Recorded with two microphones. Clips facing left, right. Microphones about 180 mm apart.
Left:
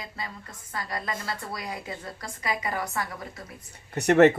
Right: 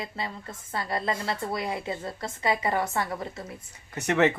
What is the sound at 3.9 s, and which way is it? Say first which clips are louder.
Speech: left 6 dB; 40° left (ahead or behind).